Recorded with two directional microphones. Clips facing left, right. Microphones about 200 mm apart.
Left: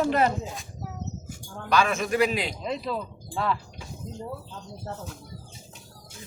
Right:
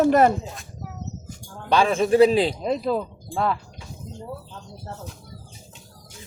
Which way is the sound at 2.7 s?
45° right (ahead or behind).